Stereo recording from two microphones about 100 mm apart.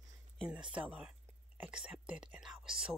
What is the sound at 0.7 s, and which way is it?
Speech, 10° right (ahead or behind).